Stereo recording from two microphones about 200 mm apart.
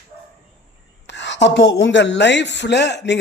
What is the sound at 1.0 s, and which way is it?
A woman's voice, 60° left (ahead or behind).